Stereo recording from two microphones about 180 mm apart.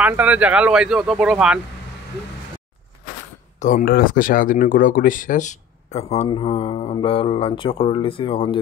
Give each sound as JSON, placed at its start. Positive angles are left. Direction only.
{"t": 0.0, "sound": "speech", "side_deg": -10}
{"t": 3.5, "sound": "speech", "side_deg": 45}